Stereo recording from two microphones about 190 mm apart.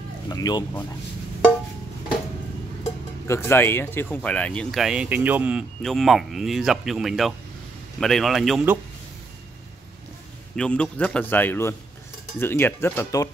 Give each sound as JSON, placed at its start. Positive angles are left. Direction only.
{"t": 0.3, "sound": "speech", "side_deg": 20}
{"t": 2.8, "sound": "speech", "side_deg": 15}
{"t": 10.5, "sound": "a man's voice", "side_deg": 5}